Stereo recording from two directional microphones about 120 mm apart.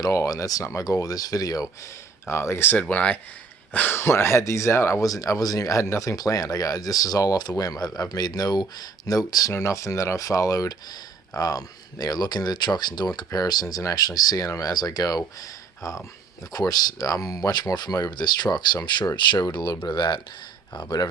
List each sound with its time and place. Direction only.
0.0 s speech: 30° left (ahead or behind)
15.4 s a sound: 30° left (ahead or behind)
16.5 s speech: 30° left (ahead or behind)